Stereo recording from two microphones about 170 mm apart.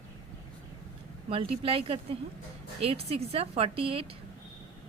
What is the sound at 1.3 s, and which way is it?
Speech, 35° right (ahead or behind).